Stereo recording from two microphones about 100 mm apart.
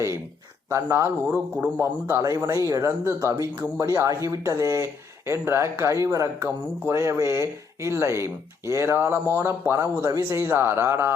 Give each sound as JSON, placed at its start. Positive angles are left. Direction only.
{"t": 0.7, "sound": "speech", "side_deg": -25}
{"t": 1.3, "sound": "a man's voice", "side_deg": -15}
{"t": 1.8, "sound": "speech", "side_deg": -25}